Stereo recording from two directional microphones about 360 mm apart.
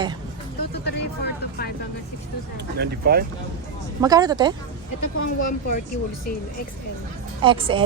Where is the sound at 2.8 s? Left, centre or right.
Right.